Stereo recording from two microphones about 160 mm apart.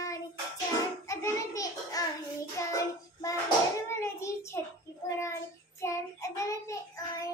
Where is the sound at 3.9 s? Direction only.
15° left (ahead or behind).